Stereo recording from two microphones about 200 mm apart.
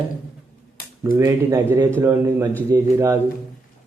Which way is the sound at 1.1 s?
15° right (ahead or behind).